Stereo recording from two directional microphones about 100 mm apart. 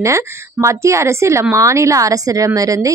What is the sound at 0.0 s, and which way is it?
Speech, 30° right (ahead or behind).